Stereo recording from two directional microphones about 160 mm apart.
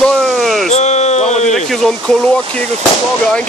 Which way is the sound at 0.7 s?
45° left (ahead or behind).